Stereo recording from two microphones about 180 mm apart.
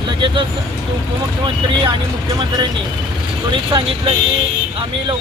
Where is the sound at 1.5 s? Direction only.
25° right (ahead or behind).